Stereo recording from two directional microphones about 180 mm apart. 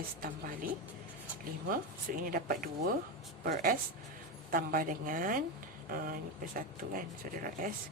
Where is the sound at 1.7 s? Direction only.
50° right (ahead or behind).